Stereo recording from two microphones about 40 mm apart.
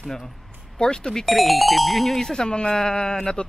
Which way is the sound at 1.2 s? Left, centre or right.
Centre.